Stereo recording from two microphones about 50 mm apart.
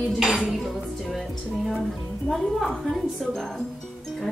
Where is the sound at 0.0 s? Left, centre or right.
Centre.